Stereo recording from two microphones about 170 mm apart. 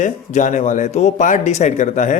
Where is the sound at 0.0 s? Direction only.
45° left (ahead or behind).